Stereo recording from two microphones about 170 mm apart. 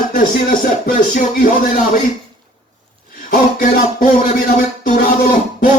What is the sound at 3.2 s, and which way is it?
Music, 55° left (ahead or behind).